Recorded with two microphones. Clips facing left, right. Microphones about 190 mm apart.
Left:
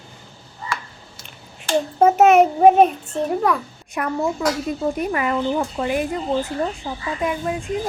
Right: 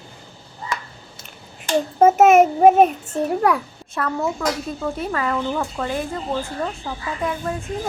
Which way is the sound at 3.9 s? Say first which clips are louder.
Left 1 dB; 15° left (ahead or behind).